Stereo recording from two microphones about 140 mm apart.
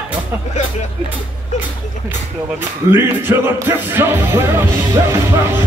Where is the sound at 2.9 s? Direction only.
15° right (ahead or behind).